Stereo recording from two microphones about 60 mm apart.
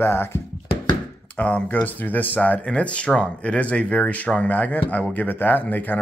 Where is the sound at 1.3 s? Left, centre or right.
Left.